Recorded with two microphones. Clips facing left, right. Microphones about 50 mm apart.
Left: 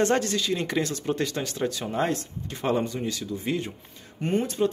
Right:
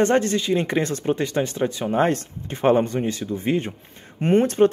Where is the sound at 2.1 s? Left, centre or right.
Right.